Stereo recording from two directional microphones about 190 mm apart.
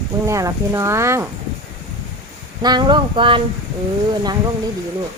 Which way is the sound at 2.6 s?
20° right (ahead or behind).